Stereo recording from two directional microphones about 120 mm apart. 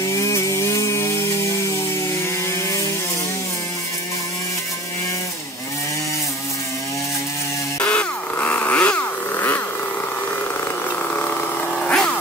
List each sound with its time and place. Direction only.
0.0 s chainsaw: 25° left (ahead or behind)
7.8 s a sound: 10° left (ahead or behind)
11.1 s vehicle: 10° left (ahead or behind)